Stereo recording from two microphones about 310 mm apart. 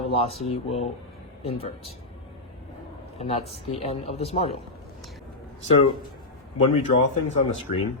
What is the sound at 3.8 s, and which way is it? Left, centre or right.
Speech, centre.